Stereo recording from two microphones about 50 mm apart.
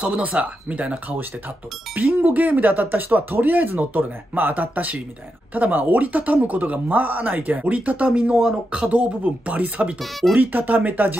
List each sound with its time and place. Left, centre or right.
0.0 s speech: right